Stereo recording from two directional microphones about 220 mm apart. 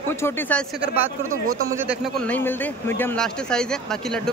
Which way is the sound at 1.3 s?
70° right (ahead or behind).